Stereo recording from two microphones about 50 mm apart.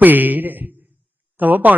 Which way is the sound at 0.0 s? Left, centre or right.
Right.